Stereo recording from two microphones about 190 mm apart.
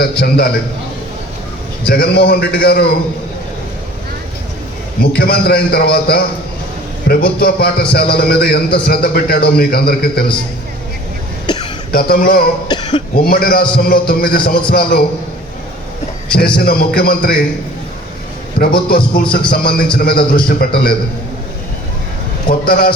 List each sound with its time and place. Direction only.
0.2 s a man's voice: 55° left (ahead or behind)
1.9 s a man's voice: 60° left (ahead or behind)
5.1 s a man's voice: 55° left (ahead or behind)
11.4 s cough: 25° left (ahead or behind)
11.9 s speech: 50° left (ahead or behind)
12.6 s speech: 25° left (ahead or behind)
13.1 s speech: 50° left (ahead or behind)
16.3 s speech: 55° left (ahead or behind)
18.6 s speech: 55° left (ahead or behind)
22.4 s speech: 50° left (ahead or behind)